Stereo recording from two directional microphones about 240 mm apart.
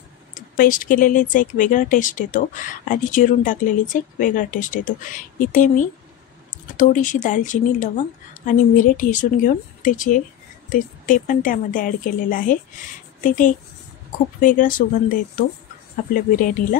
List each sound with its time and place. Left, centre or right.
0.3 s speech: left